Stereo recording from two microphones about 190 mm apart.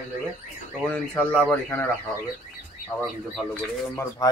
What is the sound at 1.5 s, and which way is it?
Speech, 10° left (ahead or behind).